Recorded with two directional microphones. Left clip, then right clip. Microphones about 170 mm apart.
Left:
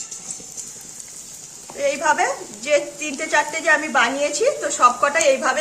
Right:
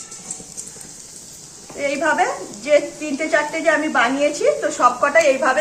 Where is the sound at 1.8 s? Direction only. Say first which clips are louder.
Even; 90° left.